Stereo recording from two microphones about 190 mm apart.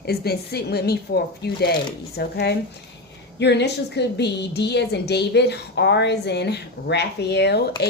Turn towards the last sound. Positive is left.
turn(degrees=60)  # may be behind; listen again after turning